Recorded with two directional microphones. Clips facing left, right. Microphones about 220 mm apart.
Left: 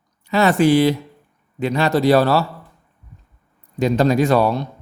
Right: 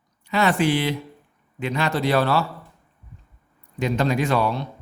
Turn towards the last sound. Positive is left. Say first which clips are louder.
# left 6 dB
turn(degrees=40)  # may be behind; listen again after turning